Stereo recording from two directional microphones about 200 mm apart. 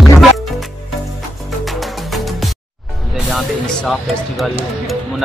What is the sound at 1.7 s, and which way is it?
Music, centre (ahead or behind).